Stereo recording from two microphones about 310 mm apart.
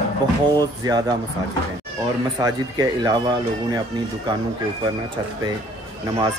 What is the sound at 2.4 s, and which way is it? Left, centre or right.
Speech, centre.